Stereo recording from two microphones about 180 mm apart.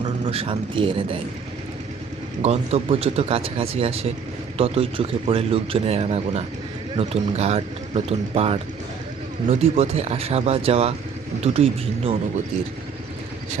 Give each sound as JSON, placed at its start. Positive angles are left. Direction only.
{"t": 0.3, "sound": "speech", "side_deg": -30}
{"t": 2.4, "sound": "speech", "side_deg": -35}